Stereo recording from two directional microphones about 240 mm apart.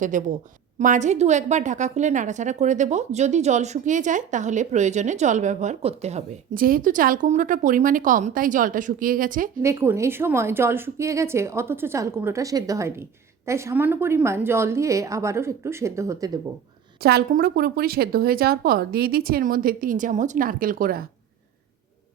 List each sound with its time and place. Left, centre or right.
0.0 s a woman's voice: right
9.6 s a woman's voice: centre
17.0 s a woman's voice: right